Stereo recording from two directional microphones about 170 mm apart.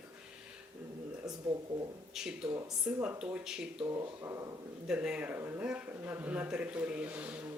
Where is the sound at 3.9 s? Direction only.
20° right (ahead or behind).